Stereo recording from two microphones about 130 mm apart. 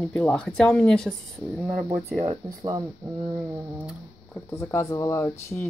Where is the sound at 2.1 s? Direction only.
50° right (ahead or behind).